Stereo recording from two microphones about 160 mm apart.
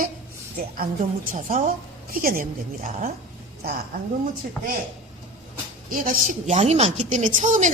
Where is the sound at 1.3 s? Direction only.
55° right (ahead or behind).